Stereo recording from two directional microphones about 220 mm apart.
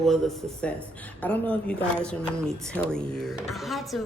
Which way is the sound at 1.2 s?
5° left (ahead or behind).